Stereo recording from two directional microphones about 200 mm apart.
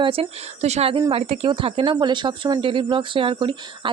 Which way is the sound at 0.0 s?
30° right (ahead or behind).